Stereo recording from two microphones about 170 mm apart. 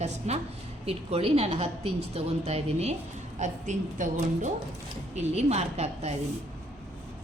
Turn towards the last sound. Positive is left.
turn(degrees=-40)  # may be behind; listen again after turning